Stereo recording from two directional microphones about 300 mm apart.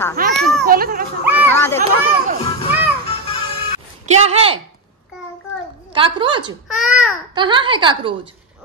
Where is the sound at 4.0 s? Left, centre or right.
Right.